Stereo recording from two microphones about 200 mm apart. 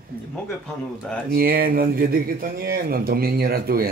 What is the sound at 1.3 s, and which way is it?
Speech, 50° right (ahead or behind).